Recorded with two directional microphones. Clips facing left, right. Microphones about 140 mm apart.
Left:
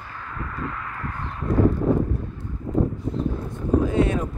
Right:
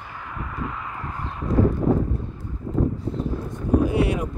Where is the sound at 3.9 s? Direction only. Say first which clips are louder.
Left 1 dB; 10° right (ahead or behind).